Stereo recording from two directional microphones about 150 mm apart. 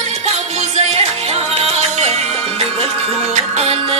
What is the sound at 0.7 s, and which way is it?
Music, 45° right (ahead or behind).